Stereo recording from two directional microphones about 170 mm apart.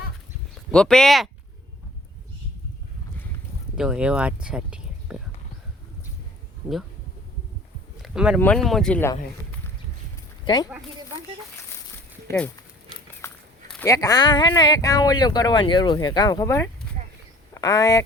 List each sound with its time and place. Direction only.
0.7 s speech: 5° left (ahead or behind)
3.8 s speech: 5° right (ahead or behind)
8.0 s a sound: 5° right (ahead or behind)
8.4 s speech: 5° left (ahead or behind)
10.4 s speech: 25° left (ahead or behind)
13.2 s walk: 15° left (ahead or behind)
13.8 s speech: 20° left (ahead or behind)